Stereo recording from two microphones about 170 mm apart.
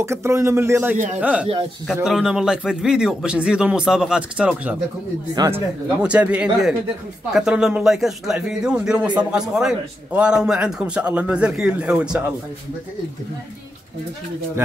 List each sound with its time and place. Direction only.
0.0 s a man's voice: 15° right (ahead or behind)
5.3 s speech: 25° right (ahead or behind)
6.0 s a man's voice: 5° right (ahead or behind)